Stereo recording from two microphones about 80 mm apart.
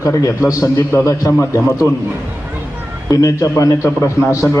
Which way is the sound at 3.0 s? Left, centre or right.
Left.